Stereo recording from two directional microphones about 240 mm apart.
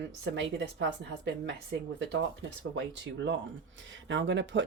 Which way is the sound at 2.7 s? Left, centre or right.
Right.